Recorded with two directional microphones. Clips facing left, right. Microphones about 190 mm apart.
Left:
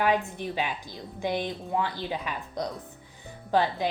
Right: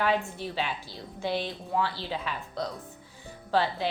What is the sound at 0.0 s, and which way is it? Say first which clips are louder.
Speech: left 2 dB; 15° left (ahead or behind).